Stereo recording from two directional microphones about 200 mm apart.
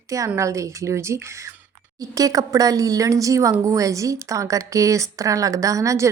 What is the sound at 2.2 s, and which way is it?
A woman's voice, 15° right (ahead or behind).